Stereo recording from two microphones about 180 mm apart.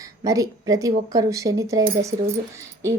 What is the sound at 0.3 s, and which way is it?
A woman's voice, 20° right (ahead or behind).